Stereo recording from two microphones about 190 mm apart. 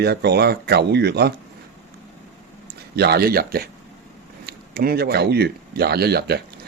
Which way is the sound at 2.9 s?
55° right (ahead or behind).